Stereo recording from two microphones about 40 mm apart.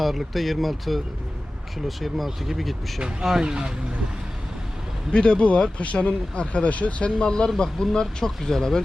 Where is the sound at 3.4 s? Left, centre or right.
Centre.